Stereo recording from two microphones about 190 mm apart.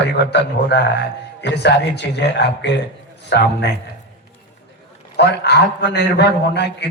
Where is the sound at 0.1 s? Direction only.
60° left (ahead or behind).